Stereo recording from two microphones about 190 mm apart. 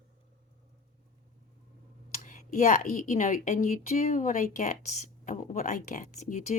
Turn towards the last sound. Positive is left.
turn(degrees=40)  # may be behind; listen again after turning